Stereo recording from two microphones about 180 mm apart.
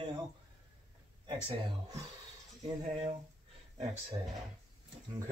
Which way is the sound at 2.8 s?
40° right (ahead or behind).